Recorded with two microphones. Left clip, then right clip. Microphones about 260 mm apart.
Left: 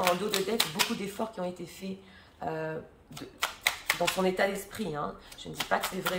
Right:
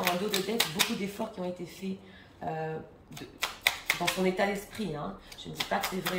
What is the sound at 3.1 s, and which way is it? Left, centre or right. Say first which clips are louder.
Speech: left 1 dB; centre.